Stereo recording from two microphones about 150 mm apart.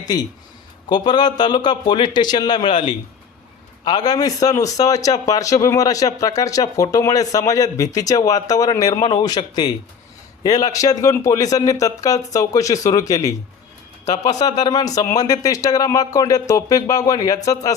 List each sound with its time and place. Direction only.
0.9 s a man's voice: 30° left (ahead or behind)
14.0 s speech: 50° left (ahead or behind)
14.6 s a man's voice: 25° left (ahead or behind)